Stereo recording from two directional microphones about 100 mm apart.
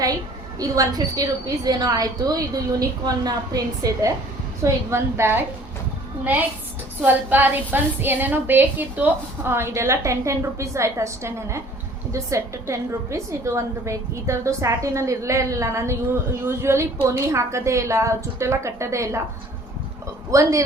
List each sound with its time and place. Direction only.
0.6 s a woman's voice: 40° right (ahead or behind)
4.6 s a woman's voice: 25° right (ahead or behind)
7.0 s a woman's voice: 20° right (ahead or behind)
20.3 s a woman's voice: 35° right (ahead or behind)